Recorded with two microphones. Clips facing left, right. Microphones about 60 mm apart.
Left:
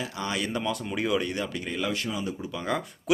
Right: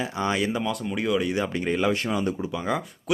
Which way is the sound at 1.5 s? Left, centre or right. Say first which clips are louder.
Right 6 dB; right.